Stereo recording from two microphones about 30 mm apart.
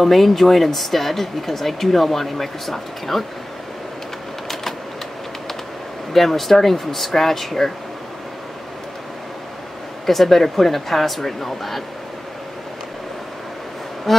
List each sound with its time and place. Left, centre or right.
0.0 s speech: centre
6.1 s speech: centre
10.0 s speech: centre
14.1 s speech: centre